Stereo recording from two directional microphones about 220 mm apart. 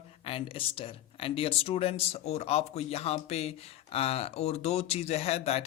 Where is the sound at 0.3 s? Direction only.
25° left (ahead or behind).